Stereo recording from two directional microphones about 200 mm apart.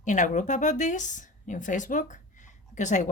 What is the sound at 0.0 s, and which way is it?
Speech, 40° left (ahead or behind).